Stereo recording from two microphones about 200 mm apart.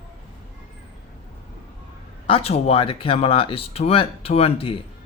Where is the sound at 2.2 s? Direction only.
30° left (ahead or behind).